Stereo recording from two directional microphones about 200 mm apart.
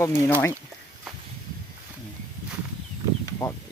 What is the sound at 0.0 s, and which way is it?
Speech, 10° left (ahead or behind).